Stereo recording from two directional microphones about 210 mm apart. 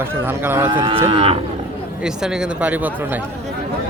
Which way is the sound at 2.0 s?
5° right (ahead or behind).